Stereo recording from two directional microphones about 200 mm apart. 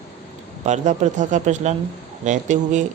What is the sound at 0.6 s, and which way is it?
Speech, 35° right (ahead or behind).